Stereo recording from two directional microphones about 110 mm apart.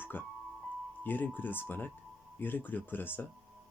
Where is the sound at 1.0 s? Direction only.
15° left (ahead or behind).